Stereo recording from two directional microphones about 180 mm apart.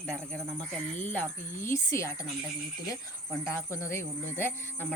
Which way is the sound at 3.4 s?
15° left (ahead or behind).